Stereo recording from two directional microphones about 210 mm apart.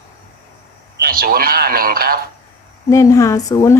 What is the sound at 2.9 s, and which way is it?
Speech, 15° left (ahead or behind).